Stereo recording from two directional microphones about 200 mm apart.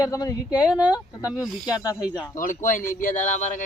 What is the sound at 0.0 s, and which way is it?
Speech, 15° left (ahead or behind).